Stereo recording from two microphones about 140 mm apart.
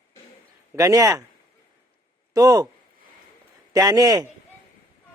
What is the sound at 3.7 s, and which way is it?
Speech, 25° right (ahead or behind).